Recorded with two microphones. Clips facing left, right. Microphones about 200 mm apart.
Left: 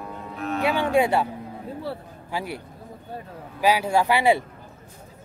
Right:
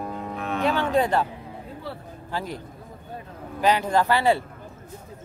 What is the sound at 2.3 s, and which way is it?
Speech, 10° left (ahead or behind).